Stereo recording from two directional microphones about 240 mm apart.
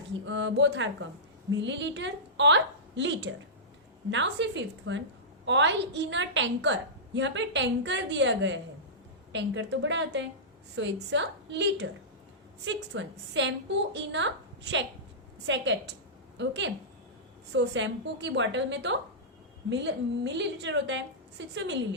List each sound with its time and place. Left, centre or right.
0.3 s a woman's voice: right